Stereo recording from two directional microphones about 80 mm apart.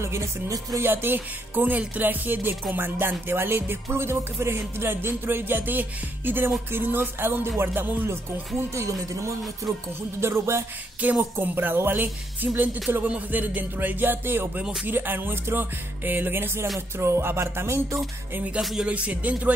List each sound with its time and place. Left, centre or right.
0.0 s music: right
0.8 s music: right
8.5 s music: right
11.0 s music: right
14.6 s speech: centre
14.9 s music: right
18.6 s speech: centre
18.9 s speech: centre